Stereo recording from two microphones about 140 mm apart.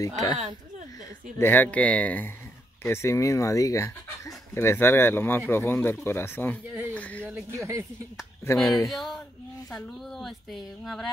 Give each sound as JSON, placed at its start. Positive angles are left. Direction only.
{"t": 0.0, "sound": "speech", "side_deg": 25}
{"t": 1.4, "sound": "speech", "side_deg": 15}
{"t": 6.9, "sound": "a sound", "side_deg": 10}
{"t": 7.5, "sound": "speech", "side_deg": -20}
{"t": 8.8, "sound": "a woman's voice", "side_deg": 0}